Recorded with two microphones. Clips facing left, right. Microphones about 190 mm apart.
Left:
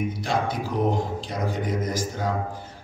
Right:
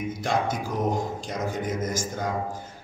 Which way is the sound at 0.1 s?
45° right (ahead or behind).